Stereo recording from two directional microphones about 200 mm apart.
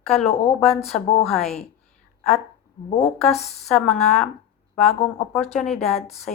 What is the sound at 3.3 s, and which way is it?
Speech, 35° left (ahead or behind).